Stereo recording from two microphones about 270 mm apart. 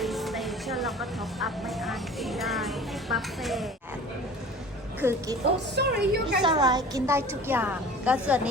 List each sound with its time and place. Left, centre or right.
0.0 s speech: centre
4.9 s a woman's voice: centre
5.7 s a woman's voice: right
6.4 s a woman's voice: centre